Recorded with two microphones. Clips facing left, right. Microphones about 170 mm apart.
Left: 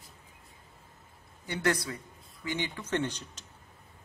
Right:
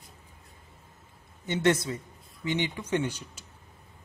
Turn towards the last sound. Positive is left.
turn(degrees=-10)  # may be behind; listen again after turning